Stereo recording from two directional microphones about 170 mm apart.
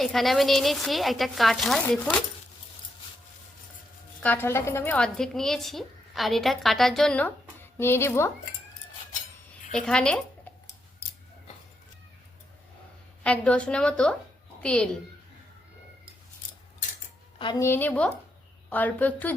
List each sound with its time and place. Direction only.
0.0 s a woman's voice: centre (ahead or behind)
4.2 s a woman's voice: 10° left (ahead or behind)
9.7 s speech: 5° left (ahead or behind)
13.2 s a woman's voice: 5° left (ahead or behind)
17.3 s a sound: 30° left (ahead or behind)
17.6 s a woman's voice: 10° left (ahead or behind)